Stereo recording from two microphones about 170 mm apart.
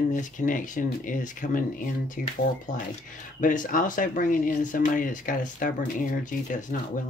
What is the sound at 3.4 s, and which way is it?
Speech, 50° left (ahead or behind).